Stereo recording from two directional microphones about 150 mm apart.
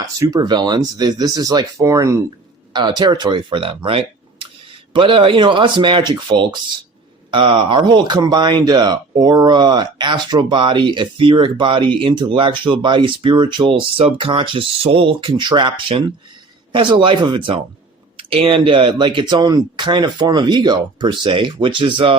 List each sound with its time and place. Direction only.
0.0 s speech: 25° right (ahead or behind)